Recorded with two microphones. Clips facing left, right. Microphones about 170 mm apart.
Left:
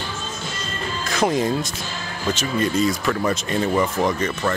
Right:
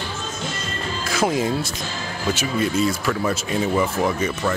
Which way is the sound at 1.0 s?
5° right (ahead or behind).